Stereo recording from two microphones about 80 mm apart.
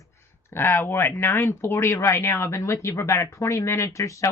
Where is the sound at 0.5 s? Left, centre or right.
Left.